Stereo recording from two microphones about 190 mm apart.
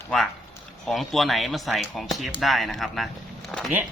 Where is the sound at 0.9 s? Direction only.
Centre (ahead or behind).